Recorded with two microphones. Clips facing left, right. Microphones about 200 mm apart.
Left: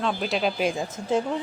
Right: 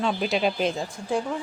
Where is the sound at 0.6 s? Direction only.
20° left (ahead or behind).